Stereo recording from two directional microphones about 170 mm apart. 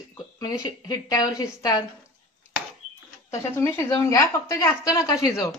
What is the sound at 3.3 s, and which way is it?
A woman's voice, 15° left (ahead or behind).